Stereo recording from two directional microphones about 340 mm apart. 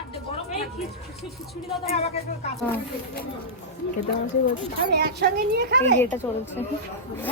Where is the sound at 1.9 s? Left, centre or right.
Centre.